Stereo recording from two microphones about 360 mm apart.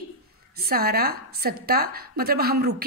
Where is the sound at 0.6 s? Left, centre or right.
Right.